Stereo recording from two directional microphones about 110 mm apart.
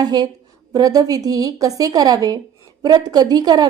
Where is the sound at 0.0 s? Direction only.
40° right (ahead or behind).